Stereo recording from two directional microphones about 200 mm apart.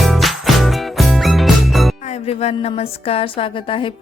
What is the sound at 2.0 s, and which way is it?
Music, 35° left (ahead or behind).